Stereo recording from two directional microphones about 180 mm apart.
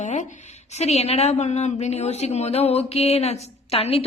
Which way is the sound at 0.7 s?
35° left (ahead or behind).